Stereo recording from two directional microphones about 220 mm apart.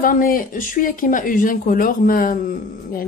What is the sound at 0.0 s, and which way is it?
Speech, 40° left (ahead or behind).